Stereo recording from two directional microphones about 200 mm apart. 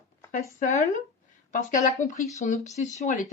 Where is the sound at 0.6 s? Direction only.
35° left (ahead or behind).